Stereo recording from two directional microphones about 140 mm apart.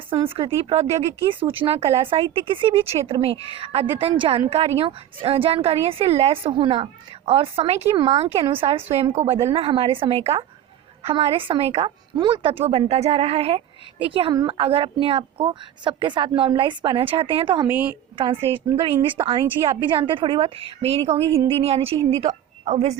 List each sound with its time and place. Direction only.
0.1 s speech: 40° right (ahead or behind)
17.7 s a woman's voice: 10° right (ahead or behind)
18.2 s speech: 35° right (ahead or behind)